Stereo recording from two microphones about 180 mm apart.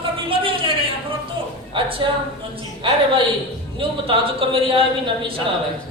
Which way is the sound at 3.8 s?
30° right (ahead or behind).